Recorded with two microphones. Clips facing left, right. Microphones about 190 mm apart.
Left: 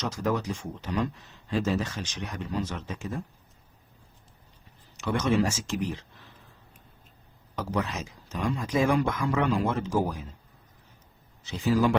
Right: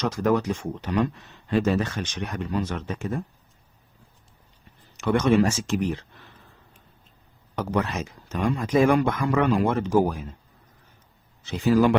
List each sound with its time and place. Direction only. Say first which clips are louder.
0.0 s speech: right 6 dB; 60° right (ahead or behind)
4.9 s speech: right 5 dB; 60° right (ahead or behind)
7.5 s speech: right 4 dB; 60° right (ahead or behind)
11.4 s speech: right 5 dB; 60° right (ahead or behind)